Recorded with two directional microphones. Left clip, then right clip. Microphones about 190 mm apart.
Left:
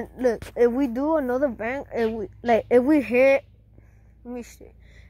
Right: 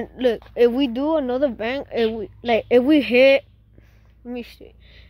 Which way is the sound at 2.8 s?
30° right (ahead or behind).